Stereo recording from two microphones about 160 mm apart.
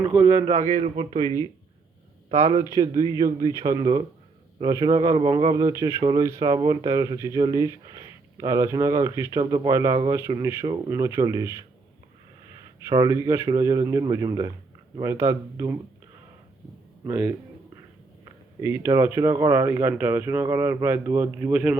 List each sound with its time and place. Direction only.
0.1 s speech: 20° right (ahead or behind)
0.7 s a man's voice: 35° right (ahead or behind)
2.3 s a man's voice: 35° right (ahead or behind)
3.0 s speech: 25° right (ahead or behind)
12.8 s speech: 25° right (ahead or behind)
17.1 s speech: 15° right (ahead or behind)
18.6 s speech: 15° right (ahead or behind)